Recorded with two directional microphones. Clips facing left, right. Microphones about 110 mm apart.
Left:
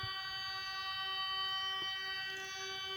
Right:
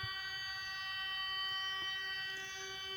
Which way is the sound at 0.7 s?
15° left (ahead or behind).